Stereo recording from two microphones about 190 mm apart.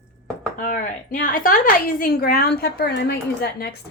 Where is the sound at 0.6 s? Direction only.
45° left (ahead or behind).